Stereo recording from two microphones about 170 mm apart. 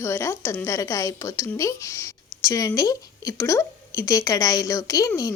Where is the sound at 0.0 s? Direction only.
15° left (ahead or behind).